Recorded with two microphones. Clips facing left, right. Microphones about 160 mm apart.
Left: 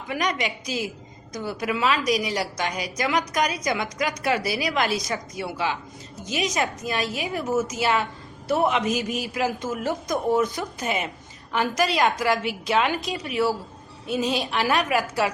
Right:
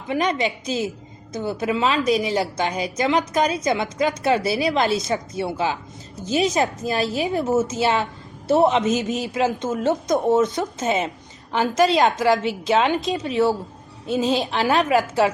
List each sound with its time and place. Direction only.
0.1 s a woman's voice: 30° right (ahead or behind)